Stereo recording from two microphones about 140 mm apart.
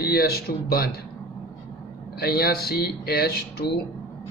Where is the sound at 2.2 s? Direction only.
90° left.